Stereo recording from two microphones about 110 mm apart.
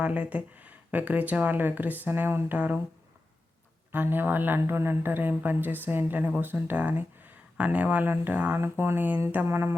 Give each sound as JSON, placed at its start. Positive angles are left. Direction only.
{"t": 0.0, "sound": "speech", "side_deg": -15}
{"t": 3.9, "sound": "speech", "side_deg": -20}